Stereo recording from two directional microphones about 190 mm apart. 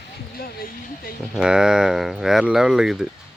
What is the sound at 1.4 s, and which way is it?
Speech, 5° right (ahead or behind).